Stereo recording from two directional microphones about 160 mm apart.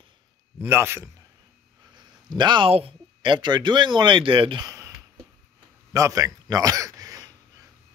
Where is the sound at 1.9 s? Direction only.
30° right (ahead or behind).